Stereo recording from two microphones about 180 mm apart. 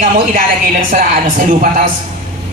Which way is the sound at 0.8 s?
45° right (ahead or behind).